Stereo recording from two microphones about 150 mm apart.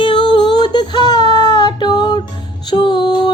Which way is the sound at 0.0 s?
35° left (ahead or behind).